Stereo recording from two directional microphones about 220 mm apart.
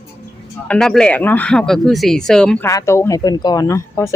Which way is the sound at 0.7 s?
5° left (ahead or behind).